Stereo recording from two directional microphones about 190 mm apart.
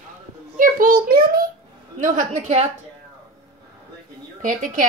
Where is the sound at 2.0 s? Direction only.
45° right (ahead or behind).